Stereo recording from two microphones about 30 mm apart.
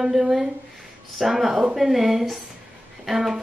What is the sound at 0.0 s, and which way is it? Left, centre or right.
A woman's voice, centre.